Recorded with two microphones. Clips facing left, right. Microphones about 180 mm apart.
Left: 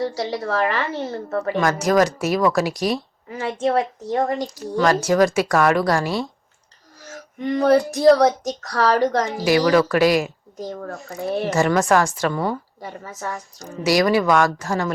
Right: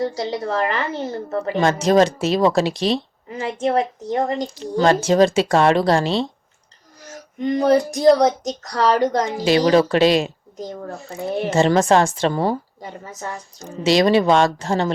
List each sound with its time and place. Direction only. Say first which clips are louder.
0.2 s a woman's voice: even; 20° right (ahead or behind)
7.4 s a woman's voice: even; 20° right (ahead or behind)
12.8 s a woman's voice: left 1 dB; 15° right (ahead or behind)